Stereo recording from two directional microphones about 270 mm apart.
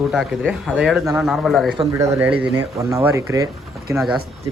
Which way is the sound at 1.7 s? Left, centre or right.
Centre.